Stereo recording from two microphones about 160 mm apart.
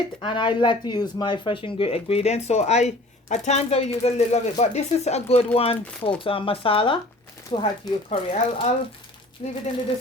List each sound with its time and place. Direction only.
0.2 s speech: 30° left (ahead or behind)